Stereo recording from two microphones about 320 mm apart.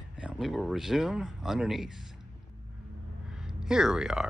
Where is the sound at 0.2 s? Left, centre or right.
Centre.